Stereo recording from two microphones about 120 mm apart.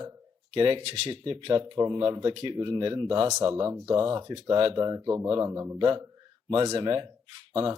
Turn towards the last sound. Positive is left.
turn(degrees=-40)  # may be behind; listen again after turning